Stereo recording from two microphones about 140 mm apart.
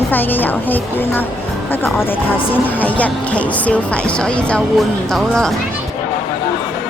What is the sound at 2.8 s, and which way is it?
Speech, 10° left (ahead or behind).